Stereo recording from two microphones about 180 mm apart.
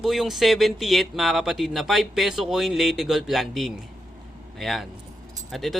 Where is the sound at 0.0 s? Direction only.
Centre (ahead or behind).